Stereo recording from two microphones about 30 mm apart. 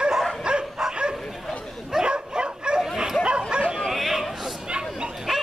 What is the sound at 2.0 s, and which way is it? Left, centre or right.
Bow-wow, right.